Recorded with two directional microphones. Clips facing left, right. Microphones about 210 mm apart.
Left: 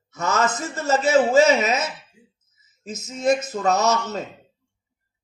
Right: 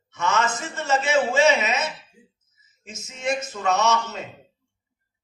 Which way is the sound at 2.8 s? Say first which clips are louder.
Left 7 dB; 40° left (ahead or behind).